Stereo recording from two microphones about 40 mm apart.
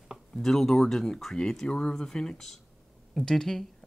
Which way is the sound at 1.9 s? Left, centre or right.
Centre.